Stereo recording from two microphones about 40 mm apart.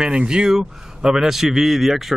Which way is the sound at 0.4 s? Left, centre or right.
Centre.